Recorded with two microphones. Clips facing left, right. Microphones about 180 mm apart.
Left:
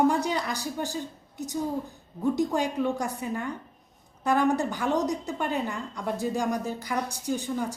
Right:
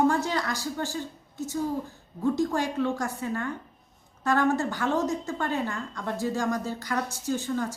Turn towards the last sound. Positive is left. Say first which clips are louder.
# right 1 dB
turn(degrees=15)  # may be behind; listen again after turning